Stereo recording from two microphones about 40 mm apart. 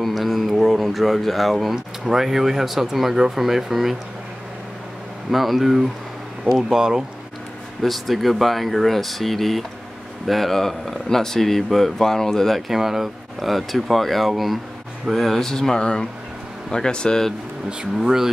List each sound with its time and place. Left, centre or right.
0.0 s speech: centre
5.3 s speech: centre
6.8 s speech: centre
7.8 s speech: centre
12.7 s speech: centre; by 17.2 s left
17.9 s speech: centre